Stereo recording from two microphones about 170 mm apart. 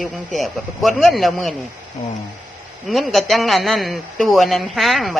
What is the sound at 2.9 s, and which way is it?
Speech, centre (ahead or behind).